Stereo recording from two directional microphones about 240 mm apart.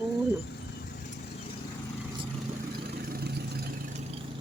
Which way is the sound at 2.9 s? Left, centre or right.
Right.